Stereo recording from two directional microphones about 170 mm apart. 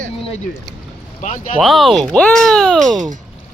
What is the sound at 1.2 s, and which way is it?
Speech, 45° left (ahead or behind).